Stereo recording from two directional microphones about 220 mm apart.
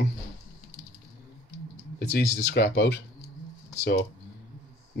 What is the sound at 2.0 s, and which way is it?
Speech, 50° left (ahead or behind).